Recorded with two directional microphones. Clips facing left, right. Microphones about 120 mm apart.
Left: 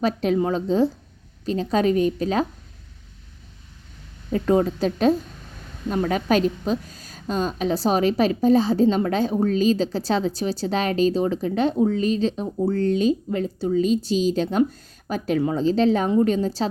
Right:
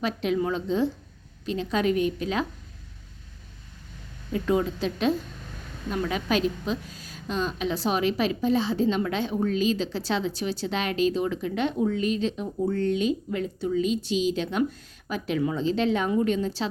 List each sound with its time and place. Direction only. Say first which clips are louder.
0.0 s a woman's voice: left 5 dB; 40° left (ahead or behind)
4.3 s a woman's voice: left 5 dB; 40° left (ahead or behind)